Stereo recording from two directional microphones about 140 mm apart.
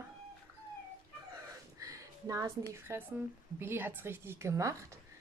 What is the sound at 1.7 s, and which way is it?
Speech, 25° right (ahead or behind).